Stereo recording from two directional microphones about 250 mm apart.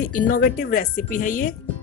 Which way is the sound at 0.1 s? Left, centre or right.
Left.